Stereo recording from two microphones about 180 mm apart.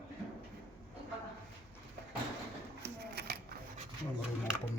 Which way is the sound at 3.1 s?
60° right (ahead or behind).